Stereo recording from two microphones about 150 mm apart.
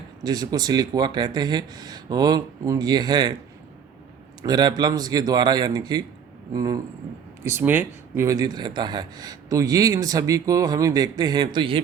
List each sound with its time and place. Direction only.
0.2 s speech: 25° right (ahead or behind)
4.4 s speech: 30° right (ahead or behind)